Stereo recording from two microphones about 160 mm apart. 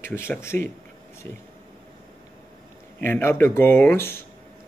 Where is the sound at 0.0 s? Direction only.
15° left (ahead or behind).